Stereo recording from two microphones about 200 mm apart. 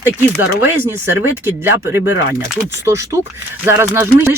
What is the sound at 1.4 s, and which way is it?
Speech, 10° right (ahead or behind).